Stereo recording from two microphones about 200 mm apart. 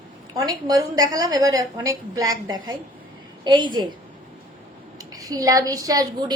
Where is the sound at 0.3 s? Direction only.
15° right (ahead or behind).